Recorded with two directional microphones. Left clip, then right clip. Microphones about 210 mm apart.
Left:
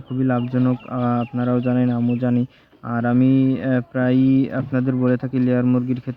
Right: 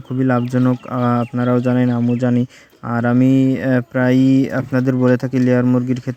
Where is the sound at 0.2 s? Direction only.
25° right (ahead or behind).